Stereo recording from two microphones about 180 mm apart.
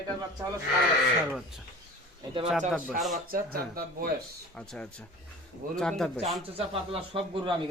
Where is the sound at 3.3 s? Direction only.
55° right (ahead or behind).